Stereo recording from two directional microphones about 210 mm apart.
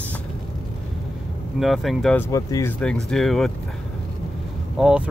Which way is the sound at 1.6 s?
Centre (ahead or behind).